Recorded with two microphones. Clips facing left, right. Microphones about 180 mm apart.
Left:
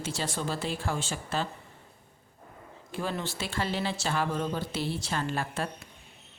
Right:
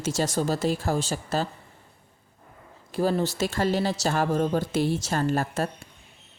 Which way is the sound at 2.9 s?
40° right (ahead or behind).